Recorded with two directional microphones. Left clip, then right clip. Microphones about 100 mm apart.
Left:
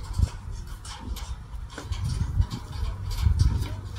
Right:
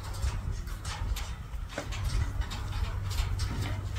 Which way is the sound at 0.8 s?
Centre (ahead or behind).